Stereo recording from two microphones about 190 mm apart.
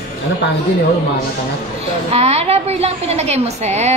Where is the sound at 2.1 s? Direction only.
35° right (ahead or behind).